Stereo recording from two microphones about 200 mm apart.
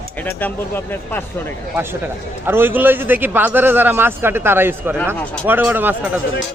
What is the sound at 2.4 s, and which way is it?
A man's voice, 10° right (ahead or behind).